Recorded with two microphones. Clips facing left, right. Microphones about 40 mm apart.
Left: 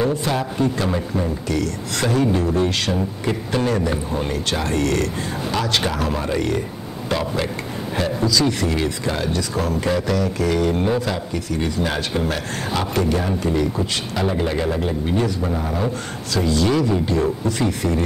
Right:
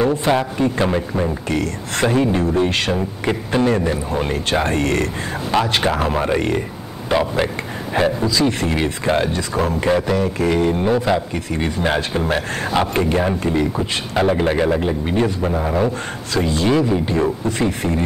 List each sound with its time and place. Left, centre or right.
0.1 s a man's voice: right
7.1 s a man's voice: right